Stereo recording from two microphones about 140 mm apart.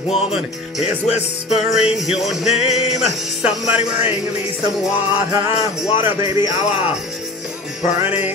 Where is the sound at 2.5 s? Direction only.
50° left (ahead or behind).